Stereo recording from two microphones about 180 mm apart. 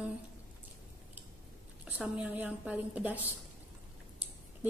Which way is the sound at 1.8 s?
10° right (ahead or behind).